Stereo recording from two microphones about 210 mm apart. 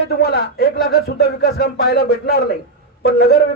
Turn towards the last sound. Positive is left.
turn(degrees=50)  # may be behind; listen again after turning